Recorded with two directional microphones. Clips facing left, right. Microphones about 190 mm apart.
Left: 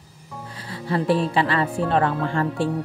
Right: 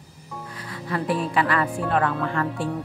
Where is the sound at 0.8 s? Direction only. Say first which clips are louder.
Left 4 dB; 30° left (ahead or behind).